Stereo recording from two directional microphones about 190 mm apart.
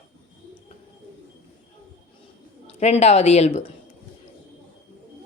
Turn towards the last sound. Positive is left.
turn(degrees=35)  # may be behind; listen again after turning